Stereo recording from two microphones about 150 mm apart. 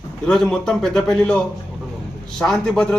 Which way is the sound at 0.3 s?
5° left (ahead or behind).